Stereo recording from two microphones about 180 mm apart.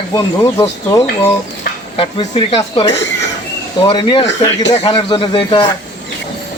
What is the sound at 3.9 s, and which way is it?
Speech, 25° left (ahead or behind).